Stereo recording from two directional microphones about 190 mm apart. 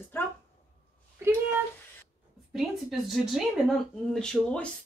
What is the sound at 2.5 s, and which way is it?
Speech, centre (ahead or behind).